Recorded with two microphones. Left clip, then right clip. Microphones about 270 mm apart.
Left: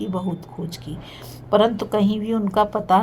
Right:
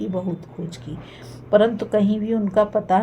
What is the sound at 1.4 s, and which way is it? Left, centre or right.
A woman's voice, left.